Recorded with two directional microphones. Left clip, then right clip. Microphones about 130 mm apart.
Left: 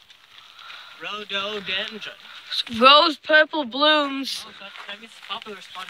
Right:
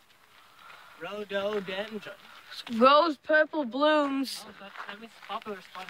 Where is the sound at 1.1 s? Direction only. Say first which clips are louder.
Left 5 dB; 90° right.